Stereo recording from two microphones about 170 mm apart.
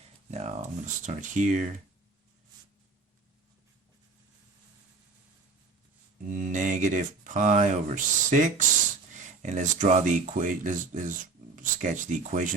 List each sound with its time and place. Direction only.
0.3 s speech: 40° right (ahead or behind)
6.2 s speech: 45° right (ahead or behind)